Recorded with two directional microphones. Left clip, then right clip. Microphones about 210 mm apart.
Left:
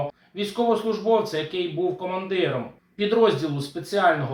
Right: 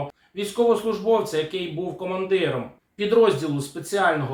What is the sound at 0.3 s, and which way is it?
Speech, 10° right (ahead or behind).